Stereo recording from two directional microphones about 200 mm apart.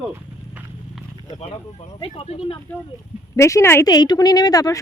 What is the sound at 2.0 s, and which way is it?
Speech, 30° left (ahead or behind).